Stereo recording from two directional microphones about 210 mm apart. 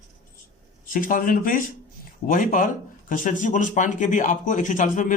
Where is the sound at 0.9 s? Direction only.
40° left (ahead or behind).